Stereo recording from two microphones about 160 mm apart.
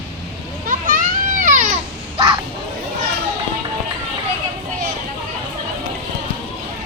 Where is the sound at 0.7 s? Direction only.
55° right (ahead or behind).